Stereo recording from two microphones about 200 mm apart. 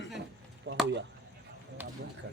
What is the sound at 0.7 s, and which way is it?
Chop, 70° right (ahead or behind).